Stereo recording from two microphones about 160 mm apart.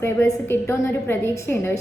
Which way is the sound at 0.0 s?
15° left (ahead or behind).